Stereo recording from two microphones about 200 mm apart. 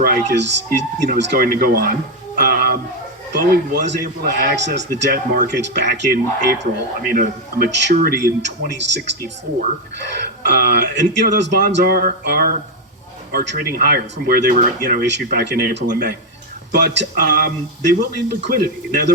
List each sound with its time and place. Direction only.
0.0 s speech: 55° right (ahead or behind)
2.4 s music: 50° right (ahead or behind)
3.3 s speech: 55° right (ahead or behind)
5.5 s speech: 60° right (ahead or behind)